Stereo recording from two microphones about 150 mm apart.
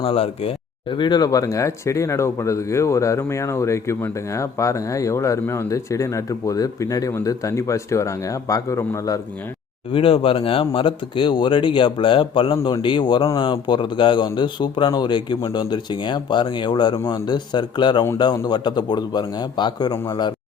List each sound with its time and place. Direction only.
0.0 s speech: 40° left (ahead or behind); by 9.2 s 20° left (ahead or behind)
9.9 s speech: 35° left (ahead or behind)